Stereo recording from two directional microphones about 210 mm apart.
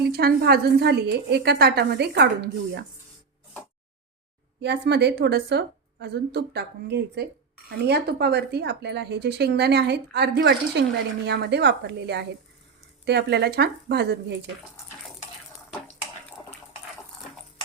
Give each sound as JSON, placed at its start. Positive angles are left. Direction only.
{"t": 0.0, "sound": "speech", "side_deg": -50}
{"t": 4.6, "sound": "speech", "side_deg": -55}